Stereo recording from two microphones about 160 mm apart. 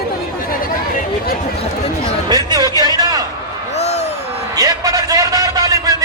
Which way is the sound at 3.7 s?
45° left (ahead or behind).